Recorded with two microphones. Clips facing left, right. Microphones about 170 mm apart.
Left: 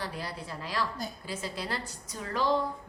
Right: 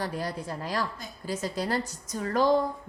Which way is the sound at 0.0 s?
45° right (ahead or behind).